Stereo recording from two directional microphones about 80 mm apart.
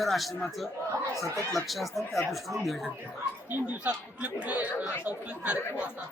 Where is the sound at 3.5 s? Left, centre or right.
Right.